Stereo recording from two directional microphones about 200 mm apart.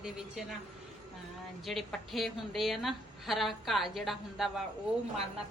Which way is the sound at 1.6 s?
Centre (ahead or behind).